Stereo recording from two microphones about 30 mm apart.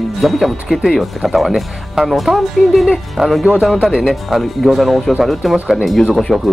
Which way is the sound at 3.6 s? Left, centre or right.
Centre.